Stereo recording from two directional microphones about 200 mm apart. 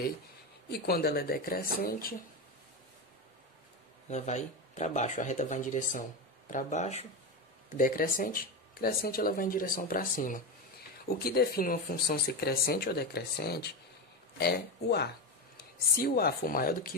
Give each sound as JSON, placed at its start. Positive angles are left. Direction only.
{"t": 0.7, "sound": "speech", "side_deg": 50}
{"t": 4.1, "sound": "speech", "side_deg": 35}
{"t": 7.7, "sound": "speech", "side_deg": 45}